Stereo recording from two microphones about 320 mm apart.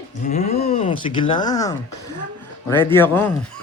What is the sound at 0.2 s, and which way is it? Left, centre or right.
Speech, left.